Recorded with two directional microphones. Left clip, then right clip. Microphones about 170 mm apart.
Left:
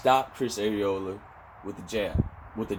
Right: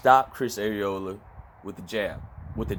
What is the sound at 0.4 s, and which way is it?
Speech, 30° right (ahead or behind).